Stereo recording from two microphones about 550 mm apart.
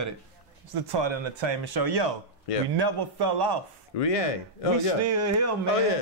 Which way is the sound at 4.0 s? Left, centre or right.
Left.